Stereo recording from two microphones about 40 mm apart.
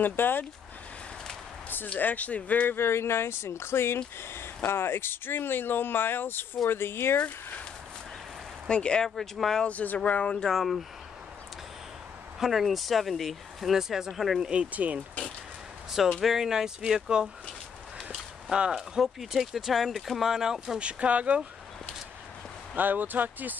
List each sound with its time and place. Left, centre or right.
0.0 s speech: left
2.0 s speech: left
2.7 s speech: left
8.6 s speech: left
9.2 s speech: centre
9.7 s speech: left
10.4 s speech: centre
12.4 s speech: centre
14.4 s speech: right
14.7 s speech: right
15.9 s speech: centre
18.7 s speech: centre
20.8 s speech: right
22.8 s speech: right